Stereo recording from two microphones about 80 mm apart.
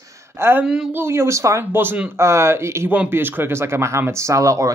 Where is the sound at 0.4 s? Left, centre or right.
Right.